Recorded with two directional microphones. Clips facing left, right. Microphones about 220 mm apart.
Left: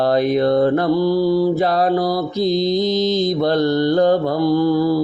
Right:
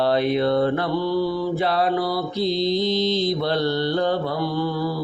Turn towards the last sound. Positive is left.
turn(degrees=40)  # may be behind; listen again after turning